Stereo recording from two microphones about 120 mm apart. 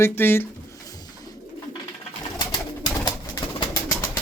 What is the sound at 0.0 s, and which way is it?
Speech, 20° left (ahead or behind).